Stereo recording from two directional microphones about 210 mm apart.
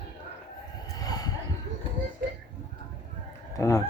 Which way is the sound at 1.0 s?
20° left (ahead or behind).